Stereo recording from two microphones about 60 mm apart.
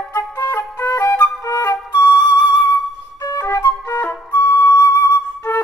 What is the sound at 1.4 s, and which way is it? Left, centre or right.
Flute, left.